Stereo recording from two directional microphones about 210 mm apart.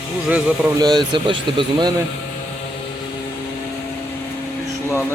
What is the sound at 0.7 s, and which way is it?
Speech, 20° right (ahead or behind).